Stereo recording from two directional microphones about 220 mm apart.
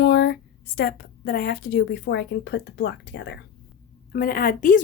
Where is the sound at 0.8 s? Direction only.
45° left (ahead or behind).